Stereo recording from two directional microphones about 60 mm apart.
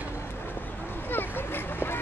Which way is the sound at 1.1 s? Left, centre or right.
Left.